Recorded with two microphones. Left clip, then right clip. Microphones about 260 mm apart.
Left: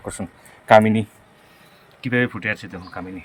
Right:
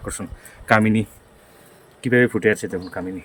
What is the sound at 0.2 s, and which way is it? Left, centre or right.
Speech, centre.